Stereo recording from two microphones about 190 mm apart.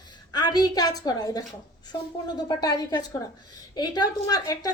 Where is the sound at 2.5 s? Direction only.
20° left (ahead or behind).